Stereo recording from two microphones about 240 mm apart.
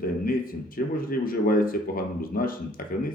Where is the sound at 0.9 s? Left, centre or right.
Left.